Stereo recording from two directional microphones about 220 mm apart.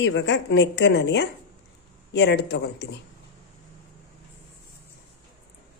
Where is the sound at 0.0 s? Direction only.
55° left (ahead or behind).